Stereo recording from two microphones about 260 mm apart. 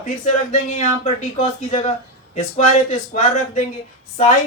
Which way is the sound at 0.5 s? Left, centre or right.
Left.